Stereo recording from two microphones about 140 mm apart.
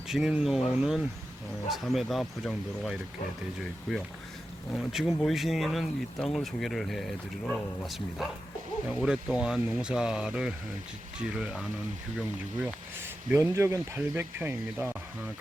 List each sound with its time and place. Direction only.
0.1 s speech: 5° right (ahead or behind)
4.7 s speech: 5° right (ahead or behind)
12.6 s speech: 15° right (ahead or behind)